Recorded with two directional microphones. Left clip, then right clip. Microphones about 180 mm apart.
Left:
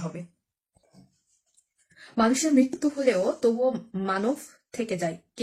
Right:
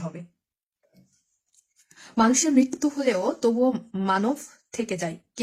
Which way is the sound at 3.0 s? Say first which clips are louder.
Left 1 dB; 40° right (ahead or behind).